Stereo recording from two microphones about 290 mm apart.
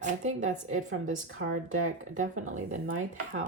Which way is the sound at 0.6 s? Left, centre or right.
Right.